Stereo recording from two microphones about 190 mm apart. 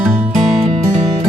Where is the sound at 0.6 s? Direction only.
30° right (ahead or behind).